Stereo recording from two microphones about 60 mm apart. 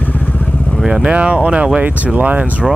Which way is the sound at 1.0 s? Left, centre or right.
Centre.